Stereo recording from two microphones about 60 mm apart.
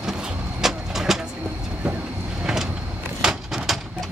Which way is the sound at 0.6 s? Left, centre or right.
Centre.